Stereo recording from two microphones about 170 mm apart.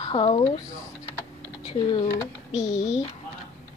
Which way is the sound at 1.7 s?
30° left (ahead or behind).